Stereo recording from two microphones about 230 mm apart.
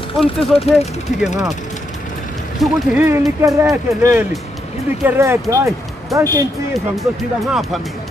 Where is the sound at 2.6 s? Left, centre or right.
Centre.